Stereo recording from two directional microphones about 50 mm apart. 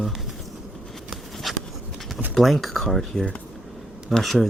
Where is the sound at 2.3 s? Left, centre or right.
Centre.